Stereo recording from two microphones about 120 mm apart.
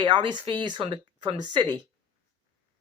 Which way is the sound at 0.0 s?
40° right (ahead or behind).